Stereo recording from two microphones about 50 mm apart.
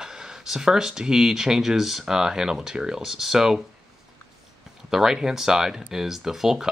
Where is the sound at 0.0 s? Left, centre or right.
Centre.